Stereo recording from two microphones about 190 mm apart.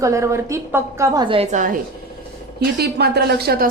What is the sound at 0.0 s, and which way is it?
A woman's voice, 15° right (ahead or behind).